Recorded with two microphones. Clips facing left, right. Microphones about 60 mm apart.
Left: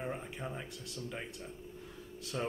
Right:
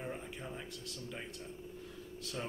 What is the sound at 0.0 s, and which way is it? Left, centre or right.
Speech, centre.